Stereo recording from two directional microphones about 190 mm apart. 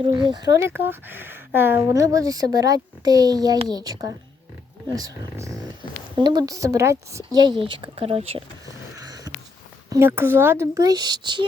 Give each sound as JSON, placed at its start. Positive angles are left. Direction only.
{"t": 0.1, "sound": "speech", "side_deg": -25}
{"t": 9.0, "sound": "a sound", "side_deg": -20}
{"t": 9.9, "sound": "speech", "side_deg": -10}